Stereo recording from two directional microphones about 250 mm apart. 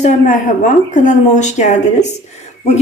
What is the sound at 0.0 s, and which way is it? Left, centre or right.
A woman's voice, left.